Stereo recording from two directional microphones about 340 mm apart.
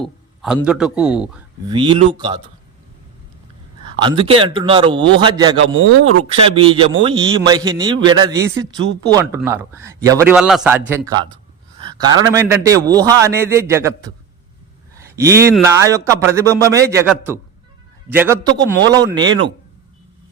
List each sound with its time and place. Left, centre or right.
0.0 s a man's voice: centre
1.7 s a man's voice: centre
4.0 s a man's voice: centre
11.8 s a sound: centre
12.3 s a man's voice: centre
18.4 s a man's voice: right
19.1 s a man's voice: centre